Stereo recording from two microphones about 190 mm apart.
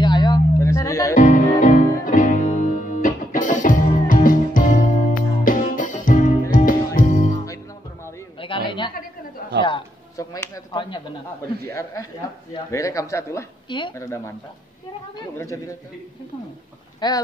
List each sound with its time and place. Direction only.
0.0 s music: 25° left (ahead or behind)
1.1 s music: 45° left (ahead or behind)
7.4 s music: 15° left (ahead or behind)
8.6 s a sound: 25° left (ahead or behind)
11.6 s speech: 15° left (ahead or behind)
17.0 s speech: 20° left (ahead or behind)